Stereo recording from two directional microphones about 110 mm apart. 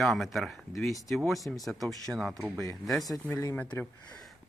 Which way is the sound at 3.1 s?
15° left (ahead or behind).